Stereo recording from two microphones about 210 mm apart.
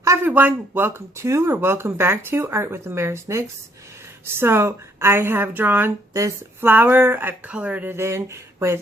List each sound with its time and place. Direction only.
0.0 s a woman's voice: 10° right (ahead or behind)